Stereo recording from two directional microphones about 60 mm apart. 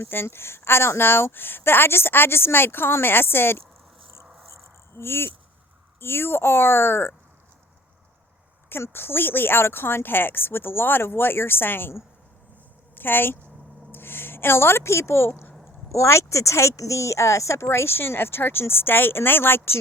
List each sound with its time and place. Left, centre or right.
0.0 s speech: left
4.9 s speech: left
8.7 s speech: left
15.9 s speech: left